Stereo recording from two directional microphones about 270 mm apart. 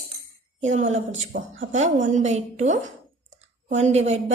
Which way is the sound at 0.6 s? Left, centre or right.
Right.